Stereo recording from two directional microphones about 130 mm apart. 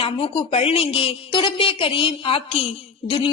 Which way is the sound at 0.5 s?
50° left (ahead or behind).